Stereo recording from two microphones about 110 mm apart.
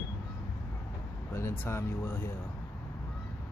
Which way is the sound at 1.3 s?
25° left (ahead or behind).